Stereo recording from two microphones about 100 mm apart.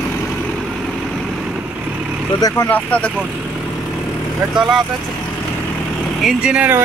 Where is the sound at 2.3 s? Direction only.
40° left (ahead or behind).